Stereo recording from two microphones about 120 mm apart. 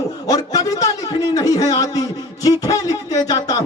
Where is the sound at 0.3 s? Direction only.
30° left (ahead or behind).